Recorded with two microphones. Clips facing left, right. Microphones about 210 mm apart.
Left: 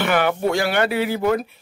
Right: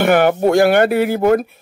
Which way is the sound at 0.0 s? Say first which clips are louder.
Right 7 dB; 50° right (ahead or behind).